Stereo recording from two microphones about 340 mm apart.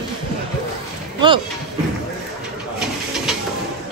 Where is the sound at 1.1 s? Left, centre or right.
Centre.